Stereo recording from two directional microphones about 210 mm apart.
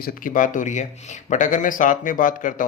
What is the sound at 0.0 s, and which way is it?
Speech, 40° left (ahead or behind).